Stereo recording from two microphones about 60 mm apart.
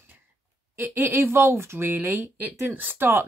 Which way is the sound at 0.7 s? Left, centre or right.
Right.